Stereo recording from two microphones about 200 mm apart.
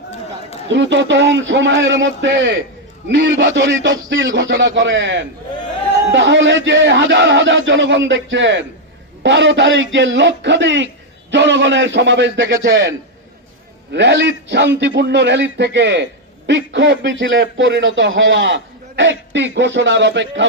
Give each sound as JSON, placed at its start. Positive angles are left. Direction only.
{"t": 0.7, "sound": "a man's voice", "side_deg": -65}
{"t": 13.9, "sound": "a man's voice", "side_deg": -60}